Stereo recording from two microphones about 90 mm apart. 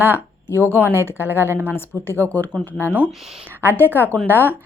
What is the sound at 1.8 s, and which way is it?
Speech, 25° left (ahead or behind).